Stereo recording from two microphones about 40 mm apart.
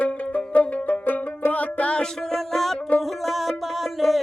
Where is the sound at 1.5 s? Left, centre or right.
Left.